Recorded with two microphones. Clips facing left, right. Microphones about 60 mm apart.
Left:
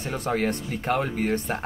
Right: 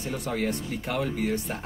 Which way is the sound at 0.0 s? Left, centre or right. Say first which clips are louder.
Left 3 dB; left.